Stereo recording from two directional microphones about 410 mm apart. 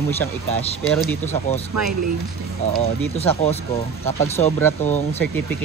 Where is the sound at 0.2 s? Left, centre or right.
Centre.